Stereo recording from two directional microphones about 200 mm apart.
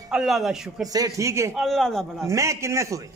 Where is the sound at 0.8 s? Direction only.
20° right (ahead or behind).